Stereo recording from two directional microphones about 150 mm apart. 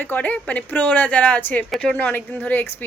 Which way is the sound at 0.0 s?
10° left (ahead or behind).